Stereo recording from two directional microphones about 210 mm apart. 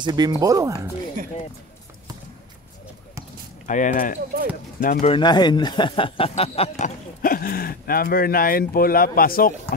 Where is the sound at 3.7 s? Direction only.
40° left (ahead or behind).